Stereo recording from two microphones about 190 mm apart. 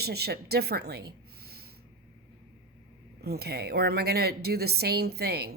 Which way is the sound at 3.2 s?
55° right (ahead or behind).